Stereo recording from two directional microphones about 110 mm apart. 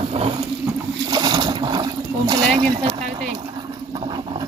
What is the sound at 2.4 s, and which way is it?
Speech, 85° right.